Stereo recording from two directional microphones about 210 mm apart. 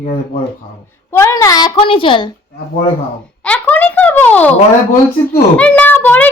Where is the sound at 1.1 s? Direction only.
15° left (ahead or behind).